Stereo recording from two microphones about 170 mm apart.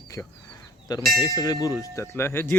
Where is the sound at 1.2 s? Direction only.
20° left (ahead or behind).